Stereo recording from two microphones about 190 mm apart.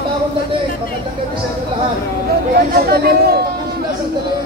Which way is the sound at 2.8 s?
55° right (ahead or behind).